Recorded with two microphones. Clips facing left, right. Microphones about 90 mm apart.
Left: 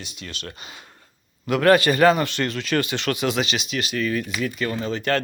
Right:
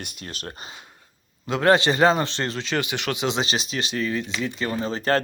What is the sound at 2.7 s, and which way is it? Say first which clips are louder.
Speech: left 4 dB; 15° right (ahead or behind).